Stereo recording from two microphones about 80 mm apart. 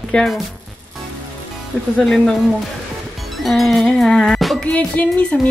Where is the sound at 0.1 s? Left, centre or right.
Centre.